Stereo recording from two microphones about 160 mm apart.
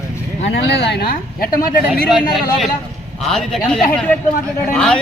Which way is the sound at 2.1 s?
Centre (ahead or behind).